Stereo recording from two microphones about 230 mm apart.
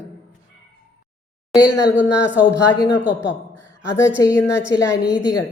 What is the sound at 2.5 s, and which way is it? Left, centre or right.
Speech, centre.